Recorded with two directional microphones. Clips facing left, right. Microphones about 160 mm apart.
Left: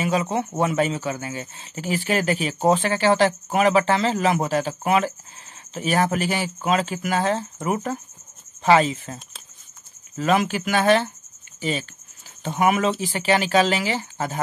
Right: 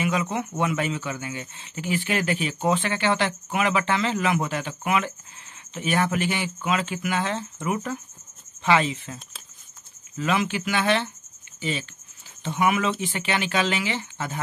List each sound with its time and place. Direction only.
0.0 s speech: 35° left (ahead or behind)
12.4 s speech: 40° left (ahead or behind)